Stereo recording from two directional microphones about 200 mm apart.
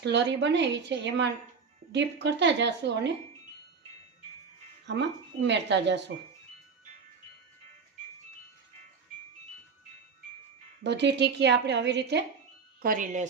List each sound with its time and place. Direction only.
0.0 s a woman's voice: 60° right (ahead or behind)
4.9 s a woman's voice: 60° right (ahead or behind)
10.8 s a woman's voice: 60° right (ahead or behind)
12.8 s speech: 45° right (ahead or behind)